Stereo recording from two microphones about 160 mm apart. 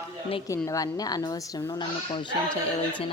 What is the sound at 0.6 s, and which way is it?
Speech, 20° left (ahead or behind).